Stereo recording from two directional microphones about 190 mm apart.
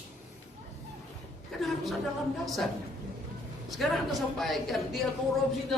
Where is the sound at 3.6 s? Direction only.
Centre (ahead or behind).